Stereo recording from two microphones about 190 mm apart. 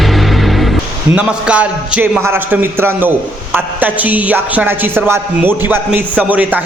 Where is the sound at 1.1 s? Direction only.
5° right (ahead or behind).